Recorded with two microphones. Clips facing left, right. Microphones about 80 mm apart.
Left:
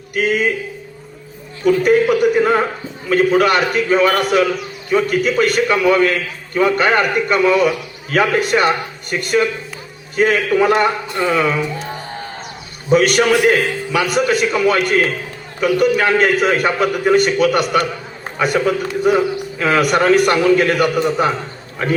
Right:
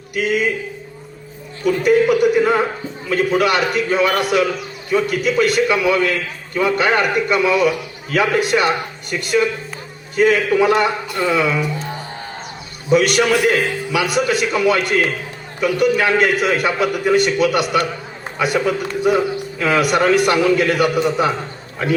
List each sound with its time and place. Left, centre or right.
0.1 s a man's voice: left
1.6 s a man's voice: left
12.9 s a man's voice: left